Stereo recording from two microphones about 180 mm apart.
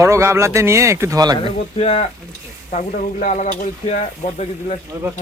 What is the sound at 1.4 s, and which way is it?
Speech, 30° left (ahead or behind).